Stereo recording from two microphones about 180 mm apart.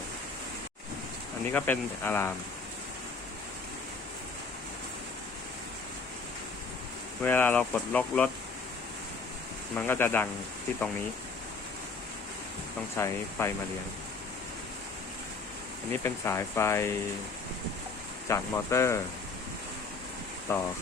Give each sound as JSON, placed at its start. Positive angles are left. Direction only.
{"t": 1.5, "sound": "speech", "side_deg": 10}
{"t": 7.2, "sound": "speech", "side_deg": 10}
{"t": 9.7, "sound": "speech", "side_deg": 10}
{"t": 13.0, "sound": "speech", "side_deg": 15}
{"t": 15.9, "sound": "speech", "side_deg": 15}
{"t": 18.3, "sound": "speech", "side_deg": 15}
{"t": 20.5, "sound": "speech", "side_deg": 15}